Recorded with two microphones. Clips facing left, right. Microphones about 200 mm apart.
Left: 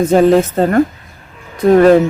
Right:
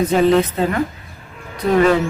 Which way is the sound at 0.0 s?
45° left (ahead or behind).